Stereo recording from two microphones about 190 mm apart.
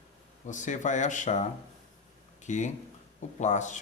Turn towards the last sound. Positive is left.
turn(degrees=40)  # may be behind; listen again after turning